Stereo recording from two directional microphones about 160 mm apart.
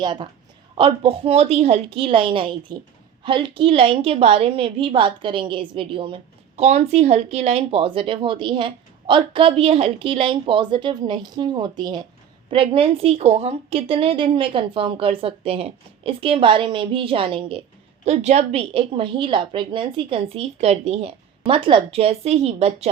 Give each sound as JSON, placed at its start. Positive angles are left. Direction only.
{"t": 0.0, "sound": "a woman's voice", "side_deg": -30}